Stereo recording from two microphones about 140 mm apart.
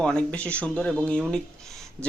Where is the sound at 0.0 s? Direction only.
10° left (ahead or behind).